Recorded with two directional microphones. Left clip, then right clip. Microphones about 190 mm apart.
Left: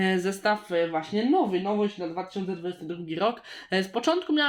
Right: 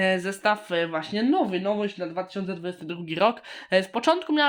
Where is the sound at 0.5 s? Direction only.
35° right (ahead or behind).